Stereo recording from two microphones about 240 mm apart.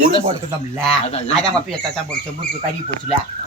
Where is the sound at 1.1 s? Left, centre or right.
Left.